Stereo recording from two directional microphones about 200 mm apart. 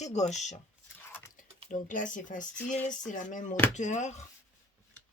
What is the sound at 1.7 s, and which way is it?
Speech, 40° left (ahead or behind).